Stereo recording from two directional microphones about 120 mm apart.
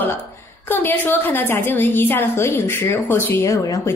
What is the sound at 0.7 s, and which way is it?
A woman's voice, 15° left (ahead or behind).